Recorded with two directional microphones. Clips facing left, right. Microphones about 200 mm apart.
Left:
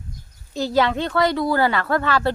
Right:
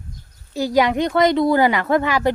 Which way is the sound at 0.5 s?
10° right (ahead or behind).